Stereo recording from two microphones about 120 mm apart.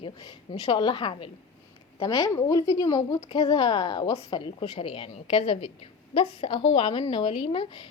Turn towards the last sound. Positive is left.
turn(degrees=45)  # may be behind; listen again after turning